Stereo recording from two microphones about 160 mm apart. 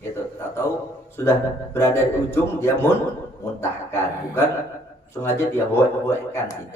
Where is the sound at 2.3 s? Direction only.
15° left (ahead or behind).